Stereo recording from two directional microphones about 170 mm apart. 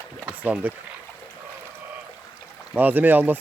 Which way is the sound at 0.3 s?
10° right (ahead or behind).